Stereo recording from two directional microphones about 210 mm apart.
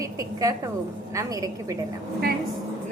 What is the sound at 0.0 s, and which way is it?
A woman's voice, 15° right (ahead or behind).